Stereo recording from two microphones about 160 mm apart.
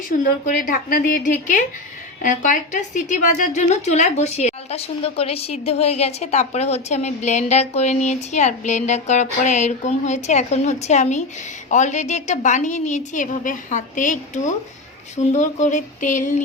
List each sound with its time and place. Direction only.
0.4 s a woman's voice: 55° left (ahead or behind)